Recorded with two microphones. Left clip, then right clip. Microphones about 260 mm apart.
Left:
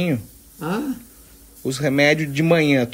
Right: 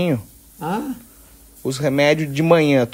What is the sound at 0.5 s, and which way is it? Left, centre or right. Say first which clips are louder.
A man's voice: right 1 dB; centre.